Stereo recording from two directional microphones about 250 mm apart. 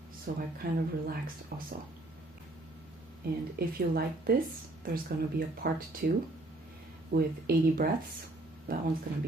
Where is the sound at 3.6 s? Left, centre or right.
Right.